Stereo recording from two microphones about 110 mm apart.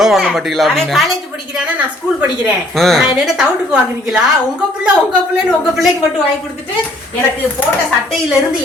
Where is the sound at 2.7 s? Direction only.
5° left (ahead or behind).